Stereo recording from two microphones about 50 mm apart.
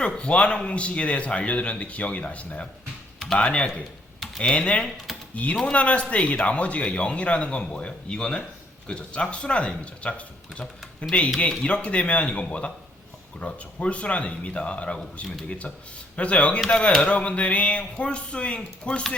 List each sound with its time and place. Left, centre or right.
0.0 s speech: left